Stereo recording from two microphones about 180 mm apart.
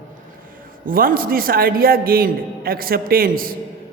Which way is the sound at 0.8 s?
50° right (ahead or behind).